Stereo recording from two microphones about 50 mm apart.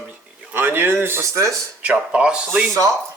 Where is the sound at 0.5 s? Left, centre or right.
Right.